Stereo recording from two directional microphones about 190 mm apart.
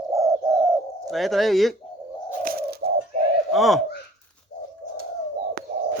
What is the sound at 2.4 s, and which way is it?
Bird, 50° right (ahead or behind).